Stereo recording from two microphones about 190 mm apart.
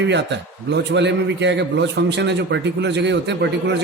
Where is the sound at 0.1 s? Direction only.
65° right (ahead or behind).